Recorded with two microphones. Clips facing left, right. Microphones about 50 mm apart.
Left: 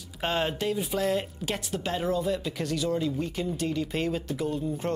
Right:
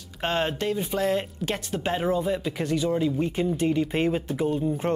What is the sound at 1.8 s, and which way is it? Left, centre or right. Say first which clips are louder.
Speech: right 3 dB; right.